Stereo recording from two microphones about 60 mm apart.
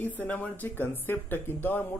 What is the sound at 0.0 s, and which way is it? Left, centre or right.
Speech, left.